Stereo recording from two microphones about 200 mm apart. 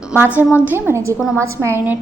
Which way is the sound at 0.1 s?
10° right (ahead or behind).